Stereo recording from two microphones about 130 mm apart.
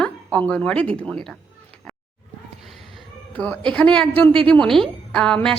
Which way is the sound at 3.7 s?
5° left (ahead or behind).